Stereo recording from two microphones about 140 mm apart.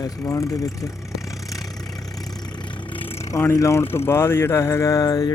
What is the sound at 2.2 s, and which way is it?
Vehicle, 30° left (ahead or behind).